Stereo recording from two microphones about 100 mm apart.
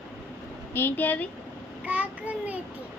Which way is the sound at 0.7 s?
20° left (ahead or behind).